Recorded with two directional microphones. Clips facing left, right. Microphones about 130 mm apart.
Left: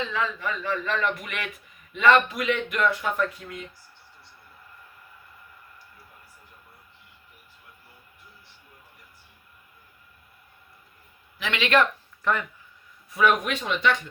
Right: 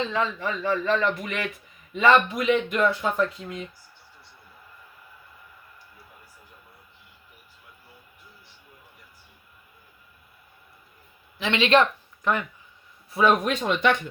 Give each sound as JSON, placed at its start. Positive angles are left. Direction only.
{"t": 0.1, "sound": "speech", "side_deg": -30}
{"t": 11.3, "sound": "speech", "side_deg": -25}
{"t": 13.1, "sound": "speech", "side_deg": -30}